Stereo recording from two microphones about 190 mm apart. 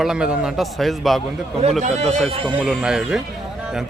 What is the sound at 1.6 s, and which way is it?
Speech, 35° right (ahead or behind).